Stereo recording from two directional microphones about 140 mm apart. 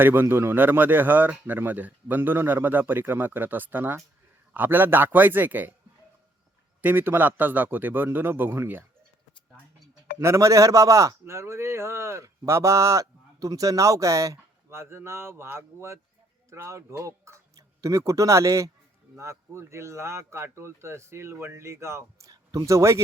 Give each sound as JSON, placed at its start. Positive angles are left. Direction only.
{"t": 0.0, "sound": "speech", "side_deg": -15}
{"t": 6.8, "sound": "speech", "side_deg": -15}
{"t": 10.2, "sound": "a man's voice", "side_deg": -20}